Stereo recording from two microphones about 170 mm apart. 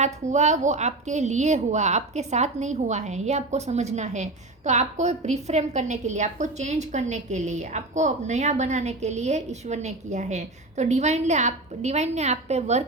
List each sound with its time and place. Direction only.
0.0 s a woman's voice: 40° right (ahead or behind)